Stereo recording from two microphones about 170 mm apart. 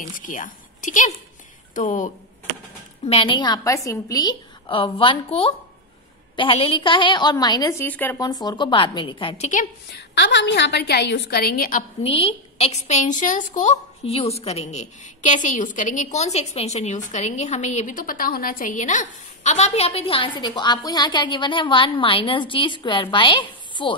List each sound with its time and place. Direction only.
0.0 s a woman's voice: 50° left (ahead or behind)
3.1 s a woman's voice: 30° left (ahead or behind)
7.8 s speech: 10° left (ahead or behind)
8.3 s a woman's voice: 25° left (ahead or behind)
9.9 s a woman's voice: 85° left; by 11.8 s 55° left (ahead or behind)
12.0 s a woman's voice: 35° left (ahead or behind)